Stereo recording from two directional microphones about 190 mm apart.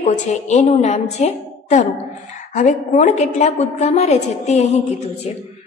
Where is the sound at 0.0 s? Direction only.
35° left (ahead or behind).